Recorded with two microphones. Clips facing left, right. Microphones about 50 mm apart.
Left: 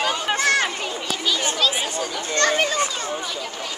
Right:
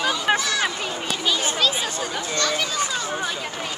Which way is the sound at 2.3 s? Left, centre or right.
Left.